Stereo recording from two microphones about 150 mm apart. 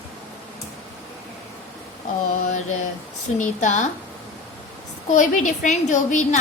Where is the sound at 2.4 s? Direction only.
55° left (ahead or behind).